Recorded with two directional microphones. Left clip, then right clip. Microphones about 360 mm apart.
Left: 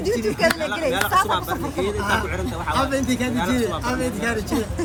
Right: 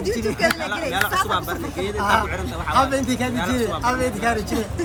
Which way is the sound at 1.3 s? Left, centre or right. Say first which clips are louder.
Left 1 dB; centre.